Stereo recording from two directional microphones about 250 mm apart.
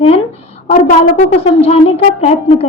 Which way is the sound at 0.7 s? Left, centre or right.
Left.